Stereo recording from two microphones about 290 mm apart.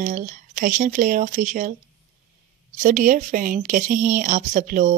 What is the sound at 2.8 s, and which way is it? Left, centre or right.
A woman's voice, right.